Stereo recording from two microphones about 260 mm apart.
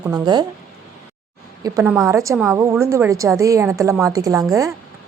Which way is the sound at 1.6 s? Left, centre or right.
Centre.